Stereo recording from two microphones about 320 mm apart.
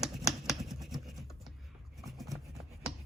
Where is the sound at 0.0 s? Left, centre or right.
Centre.